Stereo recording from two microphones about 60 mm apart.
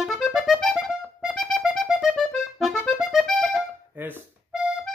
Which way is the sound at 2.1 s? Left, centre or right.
Centre.